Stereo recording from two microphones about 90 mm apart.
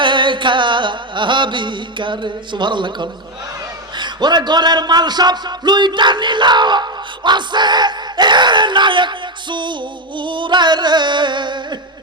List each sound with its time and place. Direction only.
0.0 s music: 60° right (ahead or behind)
3.9 s speech: 55° right (ahead or behind)